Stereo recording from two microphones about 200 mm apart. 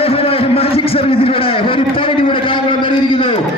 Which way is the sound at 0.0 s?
30° left (ahead or behind).